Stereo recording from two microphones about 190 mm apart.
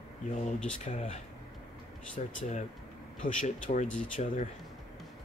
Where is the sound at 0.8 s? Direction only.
40° left (ahead or behind).